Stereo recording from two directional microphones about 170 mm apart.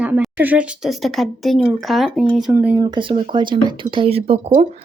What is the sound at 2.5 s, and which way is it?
Speech, 15° right (ahead or behind).